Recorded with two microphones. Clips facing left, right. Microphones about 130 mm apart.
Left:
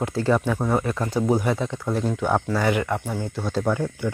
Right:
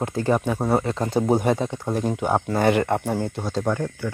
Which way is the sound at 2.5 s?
50° right (ahead or behind).